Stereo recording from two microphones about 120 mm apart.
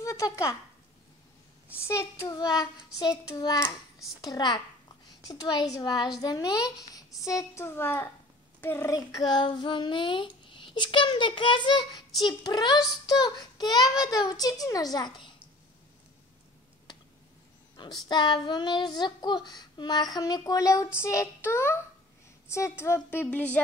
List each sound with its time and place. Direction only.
0.0 s speech: 25° left (ahead or behind)
1.8 s a woman's voice: 25° left (ahead or behind)
2.6 s child singing: 35° left (ahead or behind)
7.2 s a woman's voice: 25° left (ahead or behind)
8.5 s child singing: 20° left (ahead or behind); by 15.3 s 40° left (ahead or behind)
17.7 s child singing: 35° left (ahead or behind)
21.5 s a woman's voice: 15° left (ahead or behind)